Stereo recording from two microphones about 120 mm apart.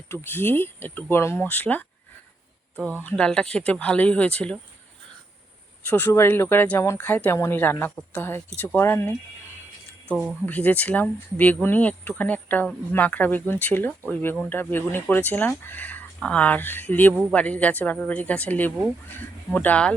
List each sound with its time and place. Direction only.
0.1 s speech: 20° left (ahead or behind)
3.0 s speech: 10° left (ahead or behind)
5.8 s speech: 15° left (ahead or behind)
10.4 s speech: 15° left (ahead or behind)